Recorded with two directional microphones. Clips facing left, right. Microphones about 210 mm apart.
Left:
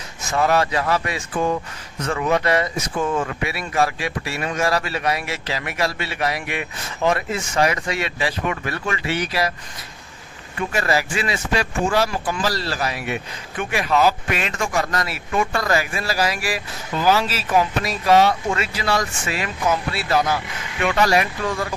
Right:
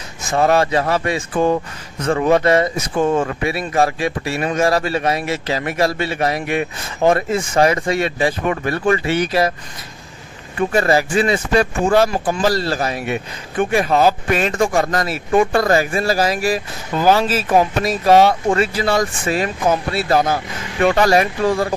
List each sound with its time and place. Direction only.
0.3 s speech: 30° right (ahead or behind)
5.9 s speech: 45° right (ahead or behind)
7.6 s speech: 35° right (ahead or behind)
7.9 s speech: 50° right (ahead or behind)
10.6 s speech: 30° right (ahead or behind)
10.9 s speech: 45° right (ahead or behind)
17.5 s speech: 40° right (ahead or behind)
18.5 s speech: 35° right (ahead or behind)
19.7 s speech: 50° right (ahead or behind); by 21.7 s 35° right (ahead or behind)